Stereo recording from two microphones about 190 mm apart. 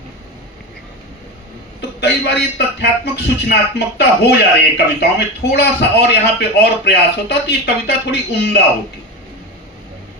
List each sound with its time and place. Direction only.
1.8 s a man's voice: 60° left (ahead or behind)